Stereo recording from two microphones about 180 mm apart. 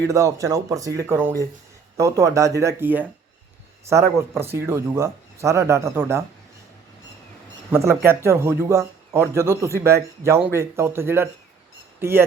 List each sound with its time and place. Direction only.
0.1 s speech: 20° right (ahead or behind)
7.7 s speech: 15° right (ahead or behind)